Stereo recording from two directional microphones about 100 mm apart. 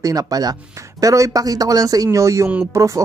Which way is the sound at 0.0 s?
40° right (ahead or behind).